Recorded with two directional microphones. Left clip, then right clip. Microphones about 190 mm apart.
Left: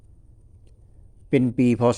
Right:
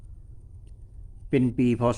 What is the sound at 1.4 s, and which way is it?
Speech, 25° left (ahead or behind).